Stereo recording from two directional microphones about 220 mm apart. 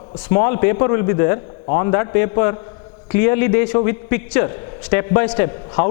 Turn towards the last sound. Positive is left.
turn(degrees=15)  # may be behind; listen again after turning